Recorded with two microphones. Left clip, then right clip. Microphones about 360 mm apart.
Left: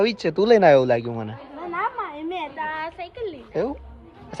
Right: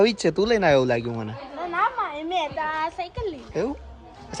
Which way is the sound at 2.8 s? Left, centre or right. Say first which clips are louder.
Right 2 dB; right.